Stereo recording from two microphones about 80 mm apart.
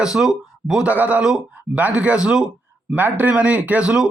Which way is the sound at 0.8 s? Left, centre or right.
Centre.